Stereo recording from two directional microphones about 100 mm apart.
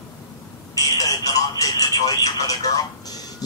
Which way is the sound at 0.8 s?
40° left (ahead or behind).